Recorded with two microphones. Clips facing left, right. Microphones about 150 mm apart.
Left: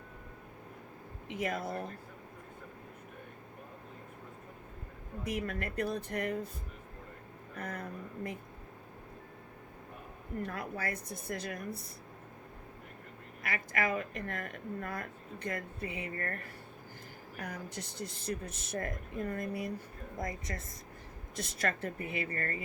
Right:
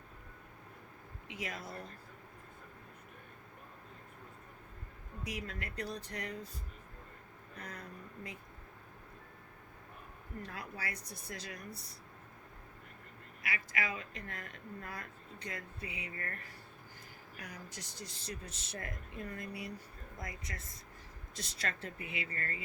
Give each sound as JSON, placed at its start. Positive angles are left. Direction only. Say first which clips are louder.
{"t": 1.3, "sound": "speech", "louder": "left 8 dB", "side_deg": 50}
{"t": 5.2, "sound": "speech", "louder": "left 7 dB", "side_deg": 55}
{"t": 7.5, "sound": "speech", "louder": "left 7 dB", "side_deg": 55}
{"t": 10.4, "sound": "speech", "louder": "left 7 dB", "side_deg": 55}
{"t": 13.4, "sound": "speech", "louder": "left 5 dB", "side_deg": 50}
{"t": 17.3, "sound": "speech", "louder": "left 8 dB", "side_deg": 55}